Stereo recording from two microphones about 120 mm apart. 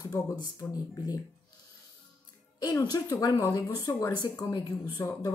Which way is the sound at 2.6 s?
35° left (ahead or behind).